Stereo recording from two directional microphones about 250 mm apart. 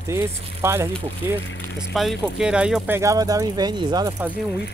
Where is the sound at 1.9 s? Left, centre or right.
Centre.